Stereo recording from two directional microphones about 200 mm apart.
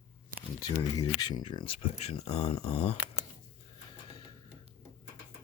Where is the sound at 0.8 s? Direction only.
20° left (ahead or behind).